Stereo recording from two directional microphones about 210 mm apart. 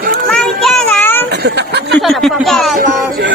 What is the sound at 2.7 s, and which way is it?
Speech, 50° right (ahead or behind).